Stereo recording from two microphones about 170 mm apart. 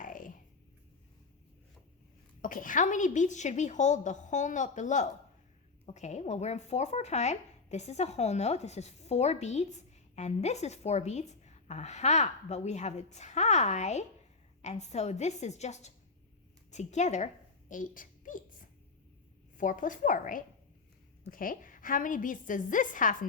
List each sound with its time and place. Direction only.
0.0 s music: 50° left (ahead or behind)
2.4 s a woman's voice: 50° left (ahead or behind)
17.7 s a sound: 50° left (ahead or behind)
19.5 s a woman's voice: 50° left (ahead or behind)